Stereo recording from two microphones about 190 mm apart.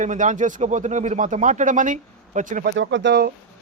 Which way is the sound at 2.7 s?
70° right (ahead or behind).